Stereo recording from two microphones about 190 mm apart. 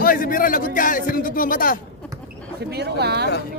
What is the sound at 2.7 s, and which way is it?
Speech, 60° right (ahead or behind).